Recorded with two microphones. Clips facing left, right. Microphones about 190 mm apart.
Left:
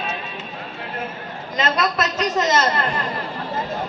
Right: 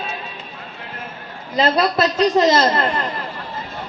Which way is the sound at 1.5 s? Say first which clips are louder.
Right 5 dB; 35° right (ahead or behind).